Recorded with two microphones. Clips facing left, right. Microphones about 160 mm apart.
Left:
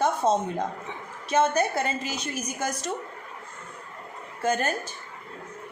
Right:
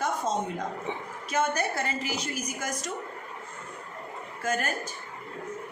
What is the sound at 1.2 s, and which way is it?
Speech, 25° left (ahead or behind).